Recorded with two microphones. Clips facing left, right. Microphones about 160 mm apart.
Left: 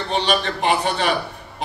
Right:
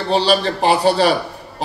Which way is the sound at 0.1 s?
35° right (ahead or behind).